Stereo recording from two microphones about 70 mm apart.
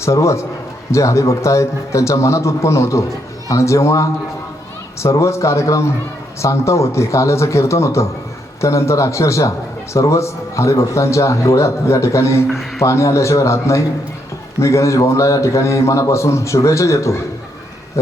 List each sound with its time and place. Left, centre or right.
0.0 s a man's voice: left